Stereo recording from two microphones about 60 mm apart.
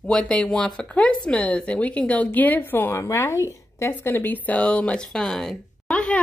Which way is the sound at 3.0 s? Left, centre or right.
Left.